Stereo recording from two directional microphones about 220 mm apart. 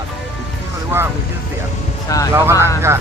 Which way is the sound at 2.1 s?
15° left (ahead or behind).